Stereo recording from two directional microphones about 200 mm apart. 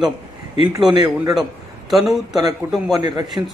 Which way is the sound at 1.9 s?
Centre (ahead or behind).